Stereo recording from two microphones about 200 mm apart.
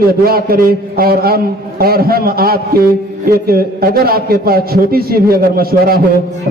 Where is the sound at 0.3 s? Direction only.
50° right (ahead or behind).